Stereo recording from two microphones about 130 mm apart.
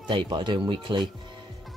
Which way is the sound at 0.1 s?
40° right (ahead or behind).